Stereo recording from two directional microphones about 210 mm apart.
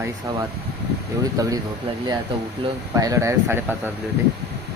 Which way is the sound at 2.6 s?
25° right (ahead or behind).